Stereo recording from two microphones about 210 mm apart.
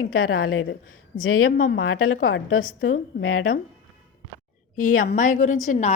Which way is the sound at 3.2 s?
90° left.